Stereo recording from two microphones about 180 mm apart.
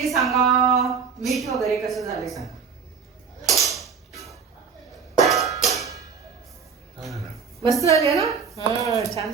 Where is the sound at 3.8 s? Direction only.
Centre (ahead or behind).